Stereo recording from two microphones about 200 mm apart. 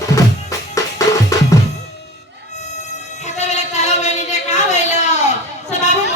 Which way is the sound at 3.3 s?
35° left (ahead or behind).